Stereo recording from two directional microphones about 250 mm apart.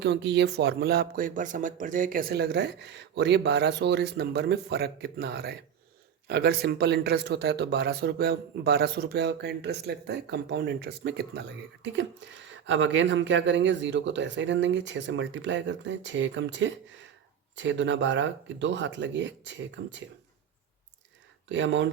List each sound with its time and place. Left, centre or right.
0.0 s speech: right
21.5 s speech: right